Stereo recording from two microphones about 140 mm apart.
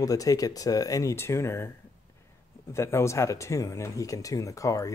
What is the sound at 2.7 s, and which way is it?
Speech, 20° left (ahead or behind).